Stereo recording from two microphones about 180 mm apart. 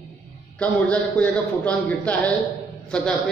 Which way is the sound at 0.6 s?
5° left (ahead or behind).